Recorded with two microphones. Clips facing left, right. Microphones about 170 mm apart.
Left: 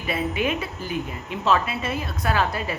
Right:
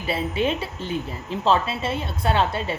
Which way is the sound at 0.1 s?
30° right (ahead or behind).